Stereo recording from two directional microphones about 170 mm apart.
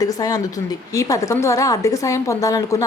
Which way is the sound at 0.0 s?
20° left (ahead or behind).